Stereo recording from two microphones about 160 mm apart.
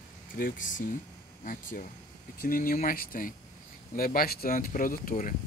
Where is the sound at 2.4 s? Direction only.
65° left (ahead or behind).